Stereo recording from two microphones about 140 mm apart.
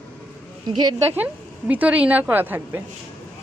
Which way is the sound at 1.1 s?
10° right (ahead or behind).